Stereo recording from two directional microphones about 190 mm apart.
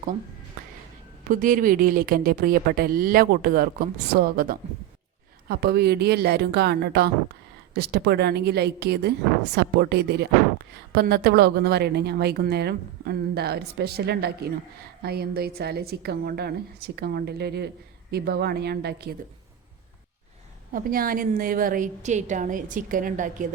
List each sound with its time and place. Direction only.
1.3 s a woman's voice: 45° right (ahead or behind)
20.7 s a woman's voice: 50° right (ahead or behind)